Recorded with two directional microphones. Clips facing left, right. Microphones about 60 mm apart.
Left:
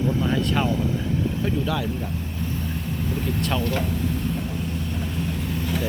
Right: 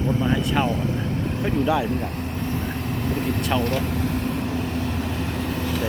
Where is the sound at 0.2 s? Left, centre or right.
Centre.